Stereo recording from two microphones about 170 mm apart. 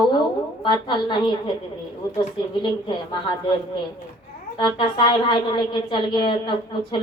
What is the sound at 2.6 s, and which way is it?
Speech, 25° left (ahead or behind).